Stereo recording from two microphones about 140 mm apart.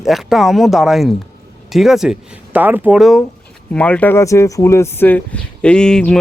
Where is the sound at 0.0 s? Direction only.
Centre (ahead or behind).